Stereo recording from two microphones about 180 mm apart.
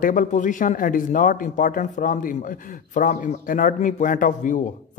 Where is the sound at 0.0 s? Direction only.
45° left (ahead or behind).